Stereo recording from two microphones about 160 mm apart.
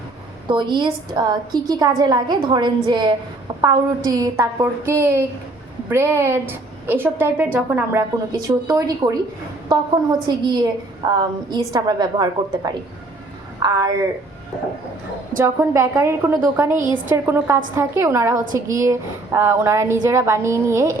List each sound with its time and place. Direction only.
0.4 s a woman's voice: 30° right (ahead or behind); by 8.0 s 10° right (ahead or behind)
8.3 s a woman's voice: 25° right (ahead or behind)
10.2 s a woman's voice: 25° right (ahead or behind)
15.4 s a woman's voice: 20° right (ahead or behind)